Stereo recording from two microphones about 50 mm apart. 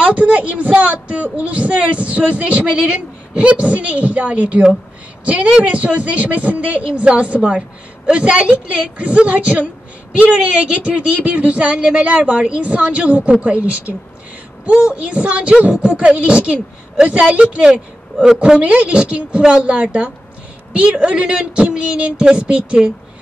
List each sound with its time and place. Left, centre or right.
0.0 s speech: right